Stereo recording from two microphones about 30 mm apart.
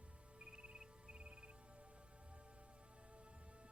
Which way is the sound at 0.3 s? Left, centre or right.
Right.